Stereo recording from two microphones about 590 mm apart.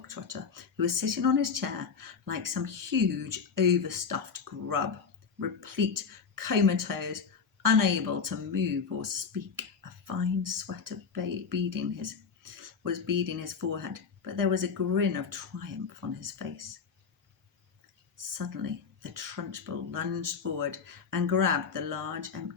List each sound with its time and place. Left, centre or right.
0.1 s speech: right
18.3 s speech: right